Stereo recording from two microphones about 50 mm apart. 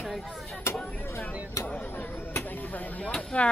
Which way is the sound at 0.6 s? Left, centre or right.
Left.